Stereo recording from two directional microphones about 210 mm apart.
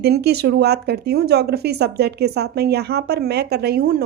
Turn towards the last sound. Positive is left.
turn(degrees=-45)  # may be behind; listen again after turning